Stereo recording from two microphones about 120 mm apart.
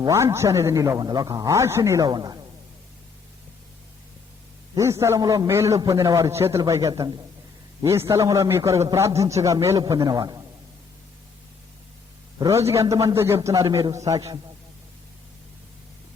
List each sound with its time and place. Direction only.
0.0 s a man's voice: 25° right (ahead or behind)
4.8 s a man's voice: 25° right (ahead or behind)
12.4 s a man's voice: 25° right (ahead or behind)